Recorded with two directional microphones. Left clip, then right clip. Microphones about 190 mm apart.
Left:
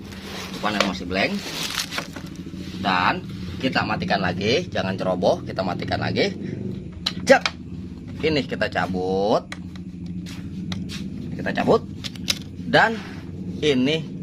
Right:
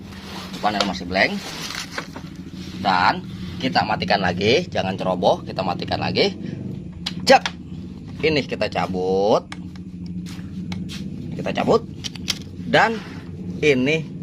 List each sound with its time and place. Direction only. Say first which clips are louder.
0.6 s speech: right 2 dB; 10° right (ahead or behind)
2.8 s speech: right 3 dB; 30° right (ahead or behind)
4.7 s speech: right 1 dB; 15° right (ahead or behind)
8.2 s speech: right 2 dB; 10° right (ahead or behind)
11.4 s keys jangling: right 1 dB; 10° right (ahead or behind)
13.6 s speech: right 3 dB; 10° right (ahead or behind)